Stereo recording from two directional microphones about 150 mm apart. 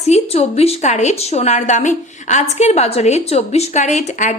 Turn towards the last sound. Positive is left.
turn(degrees=55)  # may be behind; listen again after turning